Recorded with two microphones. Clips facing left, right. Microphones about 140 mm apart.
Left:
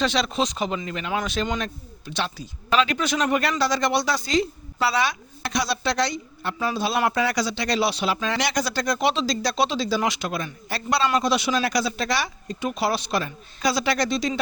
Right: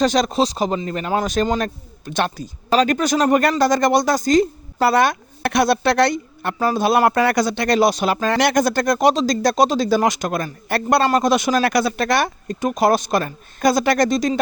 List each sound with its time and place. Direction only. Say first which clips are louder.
0.0 s a man's voice: right 6 dB; 40° right (ahead or behind)